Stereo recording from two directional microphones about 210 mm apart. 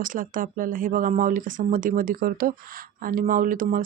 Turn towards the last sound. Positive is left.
turn(degrees=-40)  # may be behind; listen again after turning